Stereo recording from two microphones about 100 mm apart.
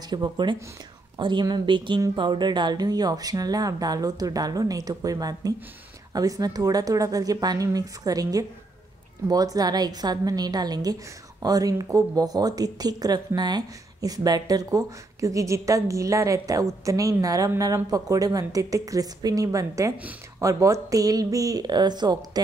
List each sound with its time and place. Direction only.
0.1 s speech: 50° right (ahead or behind)